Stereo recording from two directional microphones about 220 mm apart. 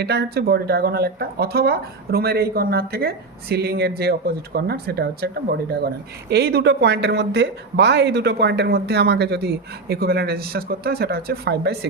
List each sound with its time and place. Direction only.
0.0 s speech: 50° right (ahead or behind)